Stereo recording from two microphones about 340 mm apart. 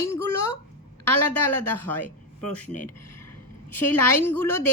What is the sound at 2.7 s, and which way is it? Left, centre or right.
Speech, left.